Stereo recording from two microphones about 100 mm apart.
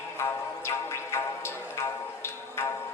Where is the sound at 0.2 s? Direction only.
25° left (ahead or behind).